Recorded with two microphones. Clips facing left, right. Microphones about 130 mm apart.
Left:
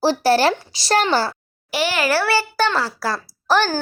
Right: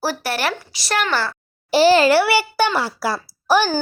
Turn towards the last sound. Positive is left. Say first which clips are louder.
# right 1 dB
turn(degrees=-5)  # may be behind; listen again after turning